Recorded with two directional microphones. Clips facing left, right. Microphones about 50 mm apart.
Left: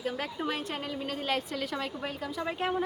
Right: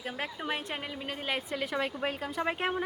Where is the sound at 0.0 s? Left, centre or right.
Centre.